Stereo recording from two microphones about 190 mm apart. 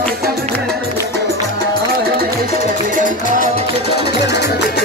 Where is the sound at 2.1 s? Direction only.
50° right (ahead or behind).